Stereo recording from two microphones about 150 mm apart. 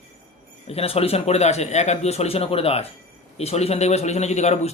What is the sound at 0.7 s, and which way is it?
A man's voice, 40° left (ahead or behind).